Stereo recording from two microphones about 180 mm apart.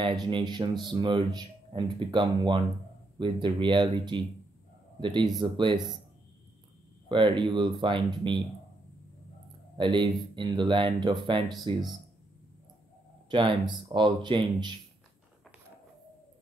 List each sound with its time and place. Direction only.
0.0 s speech: 25° right (ahead or behind)
7.1 s speech: 25° right (ahead or behind)
9.8 s speech: 25° right (ahead or behind)
13.3 s speech: 25° right (ahead or behind)